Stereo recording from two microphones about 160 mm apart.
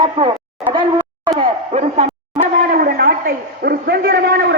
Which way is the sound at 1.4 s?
40° right (ahead or behind).